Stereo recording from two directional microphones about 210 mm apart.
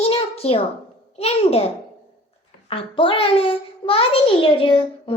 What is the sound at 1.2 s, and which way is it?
Speech, 30° left (ahead or behind).